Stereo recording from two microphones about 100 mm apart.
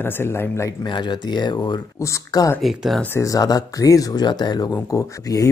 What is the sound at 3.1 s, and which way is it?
Speech, 35° left (ahead or behind).